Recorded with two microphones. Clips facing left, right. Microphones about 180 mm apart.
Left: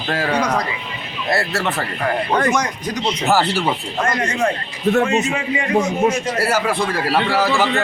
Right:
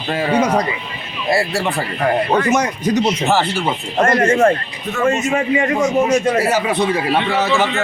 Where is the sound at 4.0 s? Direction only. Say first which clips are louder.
Right 9 dB; 50° right (ahead or behind).